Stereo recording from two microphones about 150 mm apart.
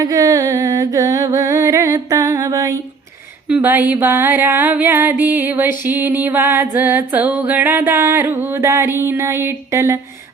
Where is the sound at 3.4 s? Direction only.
10° right (ahead or behind).